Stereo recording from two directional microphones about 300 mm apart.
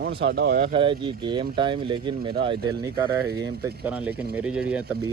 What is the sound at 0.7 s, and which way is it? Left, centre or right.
Speech, centre.